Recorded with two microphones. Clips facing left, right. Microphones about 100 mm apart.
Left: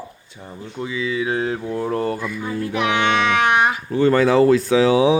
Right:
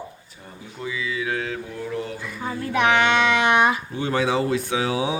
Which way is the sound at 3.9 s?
90° left.